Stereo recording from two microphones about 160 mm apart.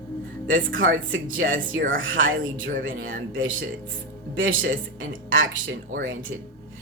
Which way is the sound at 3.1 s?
60° right (ahead or behind).